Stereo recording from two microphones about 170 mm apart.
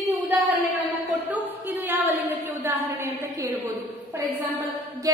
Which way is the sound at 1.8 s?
10° right (ahead or behind).